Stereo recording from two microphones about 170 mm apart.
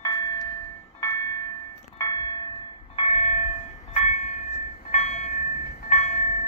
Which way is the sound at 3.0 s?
35° left (ahead or behind).